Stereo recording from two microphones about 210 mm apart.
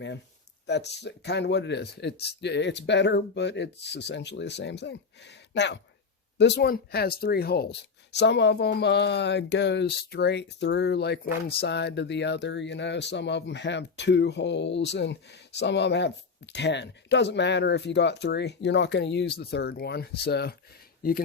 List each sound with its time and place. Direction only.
0.7 s speech: 55° left (ahead or behind)